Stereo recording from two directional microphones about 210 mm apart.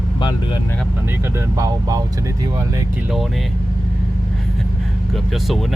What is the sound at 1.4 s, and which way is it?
Speech, 15° right (ahead or behind).